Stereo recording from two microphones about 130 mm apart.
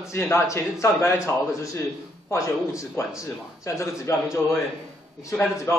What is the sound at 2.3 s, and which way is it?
A man's voice, 25° left (ahead or behind).